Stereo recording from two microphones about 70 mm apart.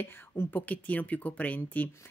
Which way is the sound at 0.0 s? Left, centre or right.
Left.